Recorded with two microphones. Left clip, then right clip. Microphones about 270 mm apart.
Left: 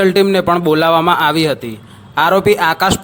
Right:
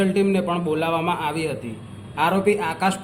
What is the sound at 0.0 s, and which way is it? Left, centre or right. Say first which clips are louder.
A man's voice: left 10 dB; left.